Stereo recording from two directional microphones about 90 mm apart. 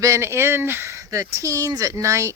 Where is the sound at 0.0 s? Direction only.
30° right (ahead or behind).